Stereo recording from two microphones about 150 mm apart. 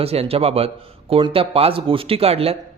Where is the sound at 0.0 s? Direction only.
40° right (ahead or behind).